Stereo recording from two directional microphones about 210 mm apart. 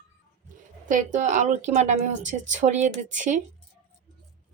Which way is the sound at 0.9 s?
35° right (ahead or behind).